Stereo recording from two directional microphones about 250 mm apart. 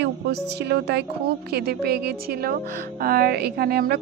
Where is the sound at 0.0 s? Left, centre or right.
Right.